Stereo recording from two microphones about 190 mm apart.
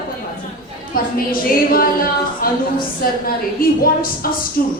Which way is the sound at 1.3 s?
50° left (ahead or behind).